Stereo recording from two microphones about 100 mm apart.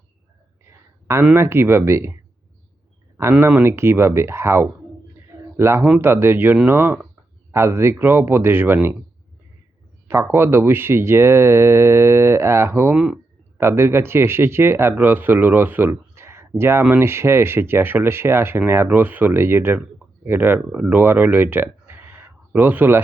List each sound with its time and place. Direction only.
1.2 s speech: 20° right (ahead or behind)
3.4 s speech: 25° right (ahead or behind)
10.1 s speech: 25° right (ahead or behind)